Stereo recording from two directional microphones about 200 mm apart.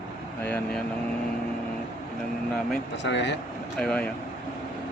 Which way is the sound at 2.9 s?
60° left (ahead or behind).